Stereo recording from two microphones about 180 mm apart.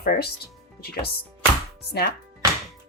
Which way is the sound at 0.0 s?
60° left (ahead or behind).